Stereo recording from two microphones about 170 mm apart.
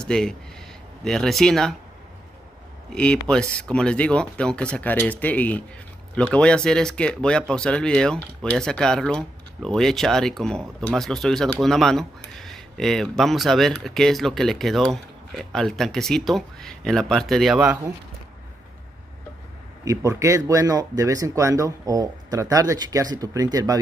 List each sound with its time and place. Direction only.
0.0 s speech: 5° left (ahead or behind)
2.9 s speech: 5° left (ahead or behind)
19.8 s speech: 20° right (ahead or behind)